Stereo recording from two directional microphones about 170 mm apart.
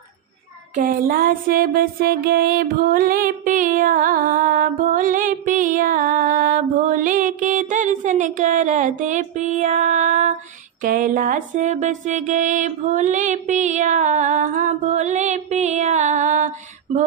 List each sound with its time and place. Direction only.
0.8 s music: 55° right (ahead or behind)